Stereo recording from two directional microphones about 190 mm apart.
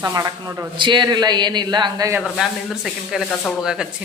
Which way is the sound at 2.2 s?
Centre (ahead or behind).